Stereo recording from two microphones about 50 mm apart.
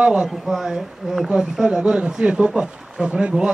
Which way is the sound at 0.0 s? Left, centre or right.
Centre.